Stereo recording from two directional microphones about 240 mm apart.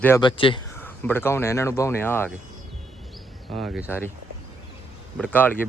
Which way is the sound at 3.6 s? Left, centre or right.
Centre.